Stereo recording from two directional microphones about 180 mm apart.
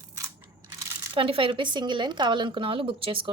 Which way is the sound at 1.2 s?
30° right (ahead or behind).